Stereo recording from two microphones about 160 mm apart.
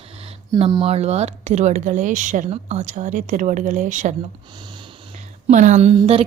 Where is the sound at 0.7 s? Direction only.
35° right (ahead or behind).